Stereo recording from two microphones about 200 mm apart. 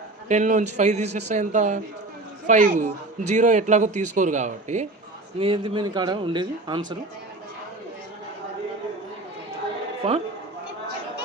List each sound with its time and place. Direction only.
0.3 s a man's voice: 40° right (ahead or behind)
5.4 s a man's voice: 25° right (ahead or behind)